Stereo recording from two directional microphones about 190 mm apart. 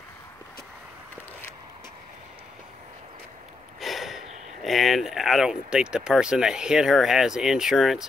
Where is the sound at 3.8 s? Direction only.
Centre (ahead or behind).